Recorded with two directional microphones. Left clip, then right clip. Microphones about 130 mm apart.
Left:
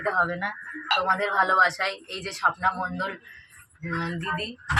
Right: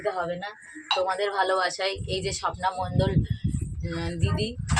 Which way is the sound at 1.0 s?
15° right (ahead or behind).